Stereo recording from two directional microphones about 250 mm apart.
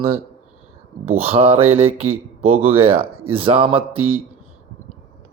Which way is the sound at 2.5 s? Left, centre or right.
Centre.